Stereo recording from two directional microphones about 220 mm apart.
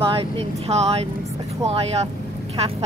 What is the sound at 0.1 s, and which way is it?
Speech, 25° right (ahead or behind).